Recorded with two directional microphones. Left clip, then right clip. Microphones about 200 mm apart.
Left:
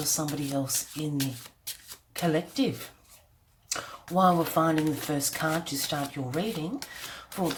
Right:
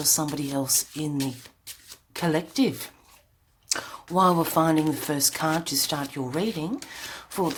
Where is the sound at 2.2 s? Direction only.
35° right (ahead or behind).